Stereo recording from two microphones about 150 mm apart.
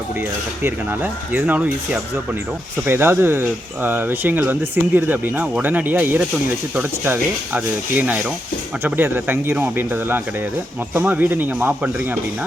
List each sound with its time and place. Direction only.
0.6 s speech: 10° right (ahead or behind)